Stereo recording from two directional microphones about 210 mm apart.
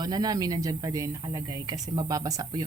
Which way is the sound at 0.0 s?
20° right (ahead or behind).